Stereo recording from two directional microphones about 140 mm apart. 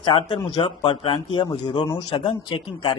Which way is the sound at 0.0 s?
35° left (ahead or behind).